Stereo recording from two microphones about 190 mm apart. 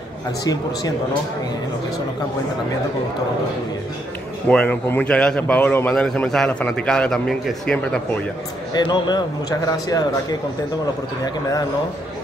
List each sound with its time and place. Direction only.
4.5 s a man's voice: 10° left (ahead or behind)
8.7 s a man's voice: 20° left (ahead or behind)